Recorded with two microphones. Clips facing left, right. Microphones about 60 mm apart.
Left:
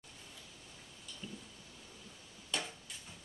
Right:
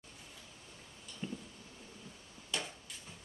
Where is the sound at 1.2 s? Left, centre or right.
Right.